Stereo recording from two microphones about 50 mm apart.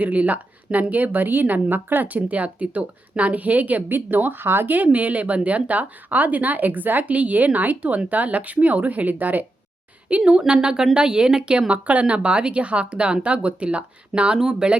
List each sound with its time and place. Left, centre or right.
0.0 s speech: right
10.1 s speech: right
14.3 s speech: centre